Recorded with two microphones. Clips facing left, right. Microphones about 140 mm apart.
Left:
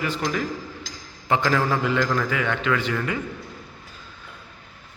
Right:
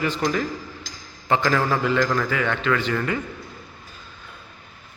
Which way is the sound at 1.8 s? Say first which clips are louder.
Right 1 dB; 15° left (ahead or behind).